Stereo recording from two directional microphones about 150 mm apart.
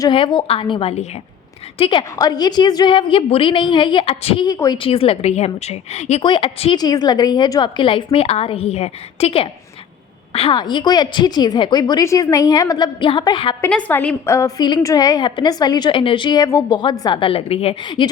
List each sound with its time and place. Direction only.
0.0 s a woman's voice: 35° left (ahead or behind)
1.8 s a woman's voice: 30° left (ahead or behind)
4.4 s a woman's voice: 25° left (ahead or behind)
4.8 s a woman's voice: 40° left (ahead or behind)
6.2 s a woman's voice: 35° left (ahead or behind)
13.7 s a woman's voice: 10° left (ahead or behind); by 17.2 s 25° left (ahead or behind)
17.2 s a woman's voice: 40° left (ahead or behind)